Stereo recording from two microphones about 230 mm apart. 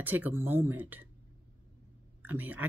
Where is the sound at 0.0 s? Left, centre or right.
Centre.